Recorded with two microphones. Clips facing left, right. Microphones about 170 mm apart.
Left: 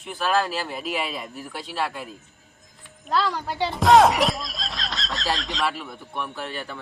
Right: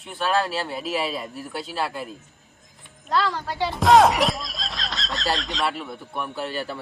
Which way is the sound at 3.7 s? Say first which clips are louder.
Even; centre (ahead or behind).